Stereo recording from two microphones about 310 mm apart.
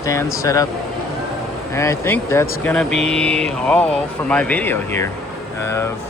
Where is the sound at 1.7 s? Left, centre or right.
Centre.